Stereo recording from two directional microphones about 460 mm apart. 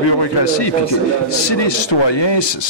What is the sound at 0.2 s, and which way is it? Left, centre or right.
Speech, left.